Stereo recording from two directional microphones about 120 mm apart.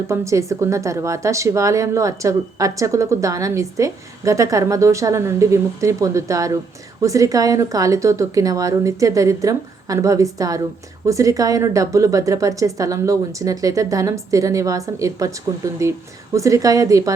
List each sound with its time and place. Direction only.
0.1 s a woman's voice: 25° right (ahead or behind)